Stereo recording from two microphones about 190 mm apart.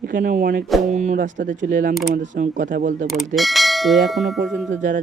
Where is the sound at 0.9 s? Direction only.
35° right (ahead or behind).